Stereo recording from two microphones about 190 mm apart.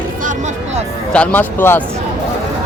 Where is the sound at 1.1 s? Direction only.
10° left (ahead or behind).